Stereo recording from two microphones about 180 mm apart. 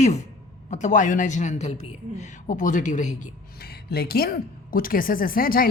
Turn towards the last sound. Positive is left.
turn(degrees=55)  # may be behind; listen again after turning